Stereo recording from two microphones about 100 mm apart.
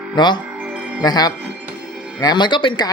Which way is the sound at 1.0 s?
45° left (ahead or behind).